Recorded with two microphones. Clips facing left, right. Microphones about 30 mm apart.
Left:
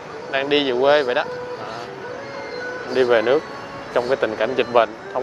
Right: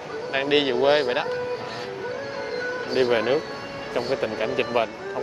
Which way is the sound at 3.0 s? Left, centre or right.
Centre.